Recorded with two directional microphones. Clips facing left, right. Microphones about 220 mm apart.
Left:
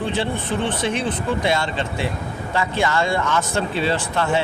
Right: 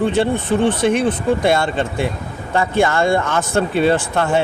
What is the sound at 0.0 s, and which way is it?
Speech, 50° right (ahead or behind).